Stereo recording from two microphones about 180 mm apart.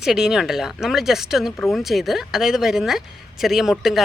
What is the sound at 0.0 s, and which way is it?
Speech, 5° right (ahead or behind).